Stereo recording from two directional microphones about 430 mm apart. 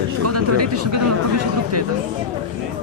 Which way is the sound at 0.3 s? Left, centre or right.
Right.